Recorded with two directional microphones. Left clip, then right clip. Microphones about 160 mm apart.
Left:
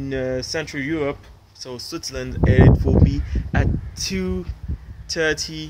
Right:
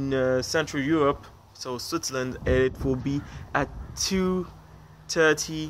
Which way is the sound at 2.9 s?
25° right (ahead or behind).